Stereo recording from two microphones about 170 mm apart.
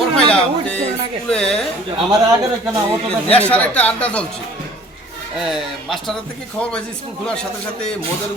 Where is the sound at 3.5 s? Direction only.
10° left (ahead or behind).